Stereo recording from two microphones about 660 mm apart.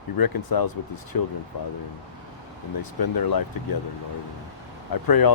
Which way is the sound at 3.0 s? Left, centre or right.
Left.